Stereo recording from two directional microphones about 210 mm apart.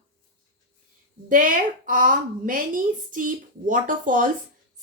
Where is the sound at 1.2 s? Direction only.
40° right (ahead or behind).